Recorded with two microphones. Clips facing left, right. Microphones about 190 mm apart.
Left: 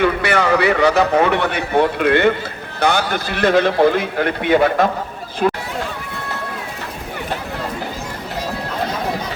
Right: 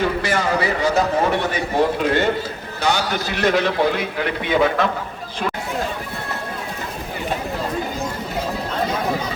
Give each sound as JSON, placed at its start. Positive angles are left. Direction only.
{"t": 0.0, "sound": "a man's voice", "side_deg": 65}